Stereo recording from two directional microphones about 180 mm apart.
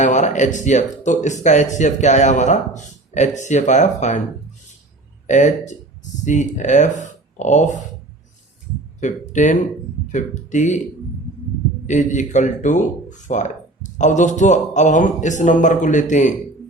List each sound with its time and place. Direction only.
0.0 s speech: 40° left (ahead or behind)
5.3 s speech: 40° left (ahead or behind)
9.0 s speech: 45° left (ahead or behind)
11.9 s speech: 40° left (ahead or behind)